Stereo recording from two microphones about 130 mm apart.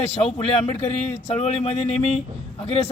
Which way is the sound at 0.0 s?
55° left (ahead or behind).